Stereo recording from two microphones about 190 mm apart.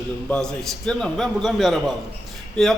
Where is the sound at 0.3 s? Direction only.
5° left (ahead or behind).